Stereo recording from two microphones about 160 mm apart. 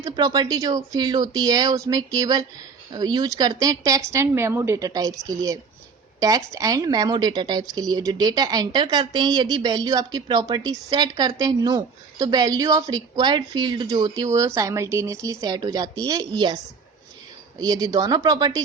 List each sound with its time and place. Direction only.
0.0 s speech: 25° right (ahead or behind)
17.6 s speech: 25° right (ahead or behind)